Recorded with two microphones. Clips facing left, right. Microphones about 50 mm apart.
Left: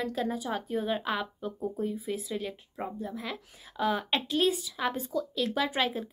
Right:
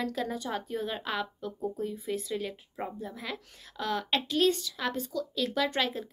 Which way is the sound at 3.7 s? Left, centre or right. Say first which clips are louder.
Left 2 dB; centre.